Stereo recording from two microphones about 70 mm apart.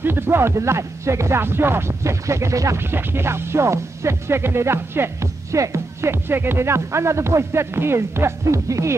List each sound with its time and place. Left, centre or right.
0.0 s speech: right
2.9 s speech: right
8.6 s speech: right